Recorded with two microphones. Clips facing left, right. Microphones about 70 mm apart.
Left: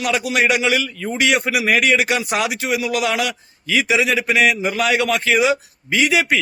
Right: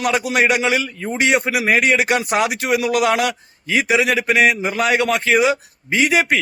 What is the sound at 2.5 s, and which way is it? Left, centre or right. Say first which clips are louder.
A man's voice: right 3 dB; right.